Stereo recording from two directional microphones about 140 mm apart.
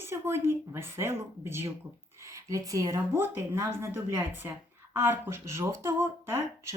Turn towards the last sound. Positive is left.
turn(degrees=-20)  # may be behind; listen again after turning